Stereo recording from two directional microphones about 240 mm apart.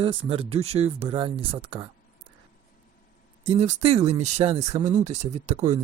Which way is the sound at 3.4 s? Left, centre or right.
Right.